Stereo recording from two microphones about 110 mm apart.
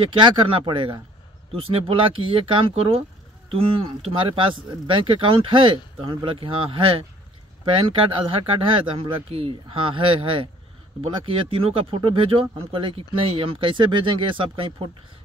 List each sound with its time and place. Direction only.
0.1 s speech: 50° right (ahead or behind)
1.5 s speech: 60° right (ahead or behind)
8.4 s speech: 55° right (ahead or behind)